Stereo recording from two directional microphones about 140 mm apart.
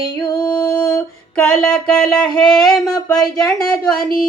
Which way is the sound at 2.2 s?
30° left (ahead or behind).